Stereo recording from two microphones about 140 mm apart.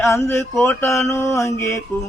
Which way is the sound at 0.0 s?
20° left (ahead or behind).